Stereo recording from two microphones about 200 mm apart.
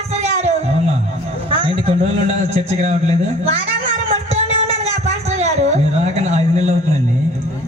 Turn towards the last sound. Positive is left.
turn(degrees=-35)  # may be behind; listen again after turning